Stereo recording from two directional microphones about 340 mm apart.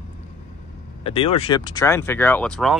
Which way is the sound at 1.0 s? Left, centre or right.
Centre.